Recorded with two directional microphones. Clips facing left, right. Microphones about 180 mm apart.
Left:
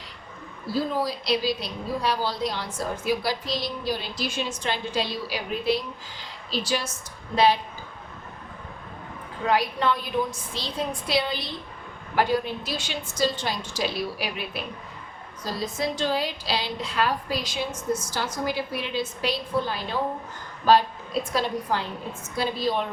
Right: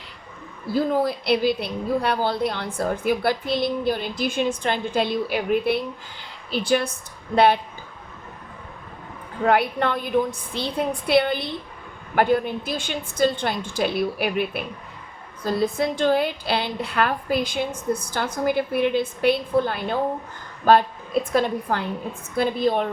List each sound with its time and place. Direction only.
0.7 s a woman's voice: 55° right (ahead or behind)
9.5 s a woman's voice: 55° right (ahead or behind)